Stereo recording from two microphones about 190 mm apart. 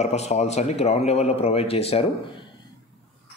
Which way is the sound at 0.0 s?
35° left (ahead or behind).